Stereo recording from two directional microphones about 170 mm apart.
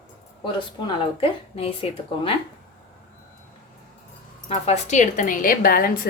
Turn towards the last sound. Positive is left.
turn(degrees=60)  # may be behind; listen again after turning